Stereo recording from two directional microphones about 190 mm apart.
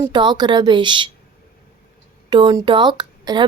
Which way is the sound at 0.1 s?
25° right (ahead or behind).